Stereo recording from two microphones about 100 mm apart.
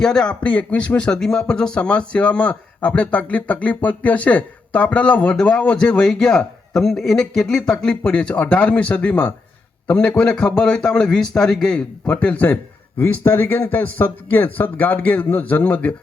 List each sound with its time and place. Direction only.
0.0 s speech: 5° left (ahead or behind)
13.0 s speech: 25° left (ahead or behind)